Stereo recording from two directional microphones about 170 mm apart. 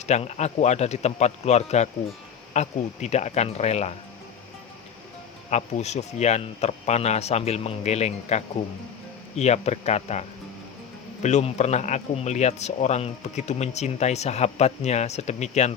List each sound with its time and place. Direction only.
0.0 s speech: 40° left (ahead or behind)
5.5 s speech: 40° left (ahead or behind)